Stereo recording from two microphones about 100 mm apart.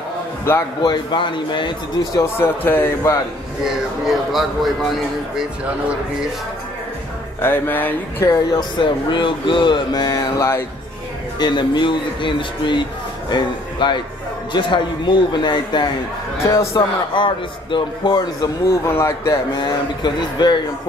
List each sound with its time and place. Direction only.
0.8 s speech: 55° left (ahead or behind)
2.2 s speech: 25° left (ahead or behind)
3.6 s speech: 5° right (ahead or behind)
7.4 s speech: 20° left (ahead or behind)
8.3 s speech: 45° left (ahead or behind)
11.3 s speech: 50° left (ahead or behind)
16.4 s a man's voice: 35° left (ahead or behind)
17.1 s speech: 55° left (ahead or behind)
18.4 s speech: 25° left (ahead or behind)
19.5 s speech: 45° left (ahead or behind)